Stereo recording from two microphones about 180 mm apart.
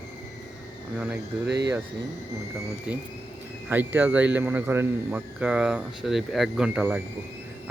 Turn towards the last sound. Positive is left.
turn(degrees=-5)  # may be behind; listen again after turning